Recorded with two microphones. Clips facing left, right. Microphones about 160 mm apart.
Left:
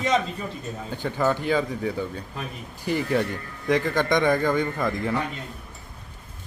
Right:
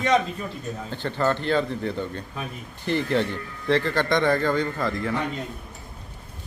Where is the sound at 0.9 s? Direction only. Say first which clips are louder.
Even; 10° left (ahead or behind).